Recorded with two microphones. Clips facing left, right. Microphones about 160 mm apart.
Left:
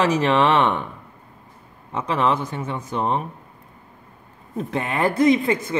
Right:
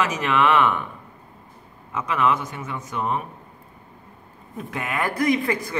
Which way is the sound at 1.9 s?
30° left (ahead or behind).